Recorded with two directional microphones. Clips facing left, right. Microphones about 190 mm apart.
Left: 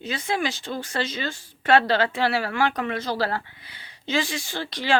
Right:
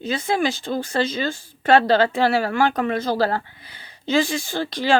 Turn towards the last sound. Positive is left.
turn(degrees=-40)  # may be behind; listen again after turning